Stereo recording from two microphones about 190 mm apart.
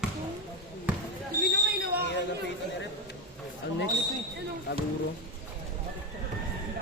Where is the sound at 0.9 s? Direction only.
10° right (ahead or behind).